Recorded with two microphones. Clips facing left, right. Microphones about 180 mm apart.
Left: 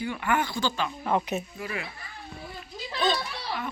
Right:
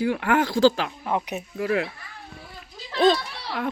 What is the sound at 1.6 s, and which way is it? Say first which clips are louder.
Speech: right 11 dB; 80° right.